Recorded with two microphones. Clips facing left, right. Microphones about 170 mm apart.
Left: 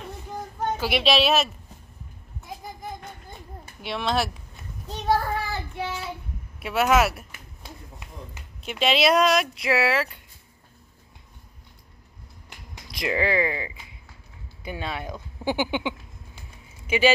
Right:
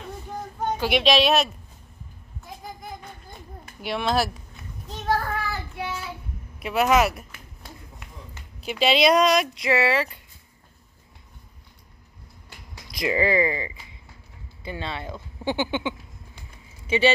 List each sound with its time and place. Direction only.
0.7 s speech: 5° left (ahead or behind)
3.8 s speech: centre (ahead or behind)
5.0 s child singing: 20° left (ahead or behind)
6.6 s speech: centre (ahead or behind)
8.6 s speech: centre (ahead or behind)
12.9 s speech: centre (ahead or behind)
14.6 s speech: 10° left (ahead or behind)